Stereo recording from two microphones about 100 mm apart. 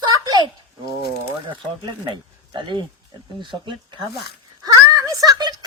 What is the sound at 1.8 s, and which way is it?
A woman's voice, 50° right (ahead or behind).